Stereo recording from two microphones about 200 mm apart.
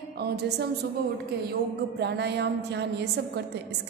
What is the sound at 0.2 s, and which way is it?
A woman's voice, 55° right (ahead or behind).